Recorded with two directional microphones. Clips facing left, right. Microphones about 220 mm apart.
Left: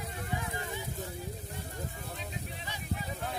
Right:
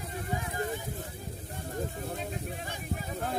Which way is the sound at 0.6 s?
45° right (ahead or behind).